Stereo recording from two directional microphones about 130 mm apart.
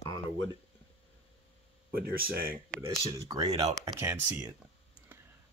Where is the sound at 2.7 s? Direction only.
25° right (ahead or behind).